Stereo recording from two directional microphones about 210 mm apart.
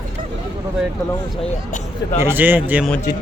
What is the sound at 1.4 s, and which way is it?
Speech, 35° left (ahead or behind).